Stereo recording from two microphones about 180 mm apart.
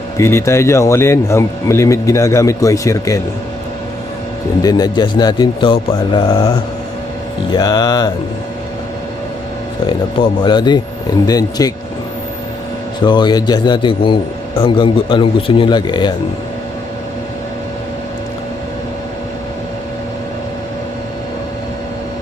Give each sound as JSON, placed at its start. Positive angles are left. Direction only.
{"t": 0.2, "sound": "a man's voice", "side_deg": 15}
{"t": 4.6, "sound": "speech", "side_deg": 20}
{"t": 7.5, "sound": "speech", "side_deg": 20}
{"t": 10.2, "sound": "speech", "side_deg": 25}
{"t": 13.0, "sound": "speech", "side_deg": 25}